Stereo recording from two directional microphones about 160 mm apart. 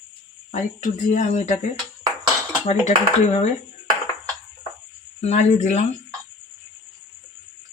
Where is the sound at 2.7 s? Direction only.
45° left (ahead or behind).